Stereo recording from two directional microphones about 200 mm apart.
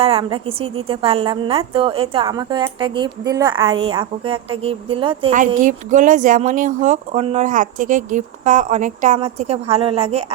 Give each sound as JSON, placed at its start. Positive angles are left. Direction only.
{"t": 0.0, "sound": "a woman's voice", "side_deg": -25}
{"t": 5.5, "sound": "speech", "side_deg": -40}